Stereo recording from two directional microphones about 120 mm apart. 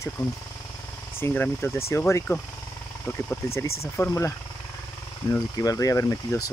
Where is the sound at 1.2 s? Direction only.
15° left (ahead or behind).